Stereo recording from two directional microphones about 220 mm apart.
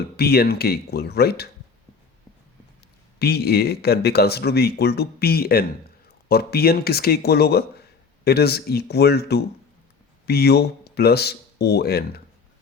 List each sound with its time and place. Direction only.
0.2 s speech: 45° left (ahead or behind)
3.2 s speech: 45° left (ahead or behind)